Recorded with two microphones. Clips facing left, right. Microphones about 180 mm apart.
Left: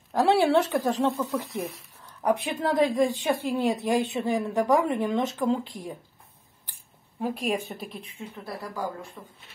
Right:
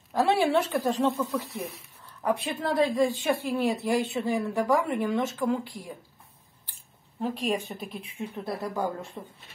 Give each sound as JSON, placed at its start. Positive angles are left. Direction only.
{"t": 0.1, "sound": "a woman's voice", "side_deg": 15}
{"t": 7.2, "sound": "a woman's voice", "side_deg": 10}
{"t": 8.5, "sound": "speech", "side_deg": -20}